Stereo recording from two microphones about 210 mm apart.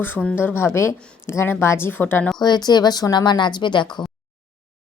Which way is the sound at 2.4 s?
20° left (ahead or behind).